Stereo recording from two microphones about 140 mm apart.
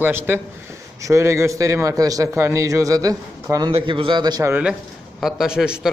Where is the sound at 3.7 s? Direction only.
40° right (ahead or behind).